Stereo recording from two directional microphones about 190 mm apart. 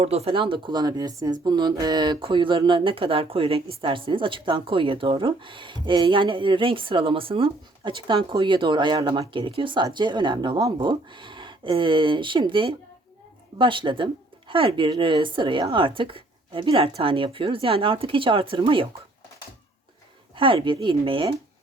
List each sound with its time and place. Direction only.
0.0 s speech: 30° right (ahead or behind)
20.3 s speech: 25° right (ahead or behind)